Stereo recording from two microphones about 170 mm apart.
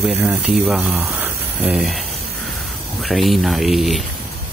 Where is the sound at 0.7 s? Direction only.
Centre (ahead or behind).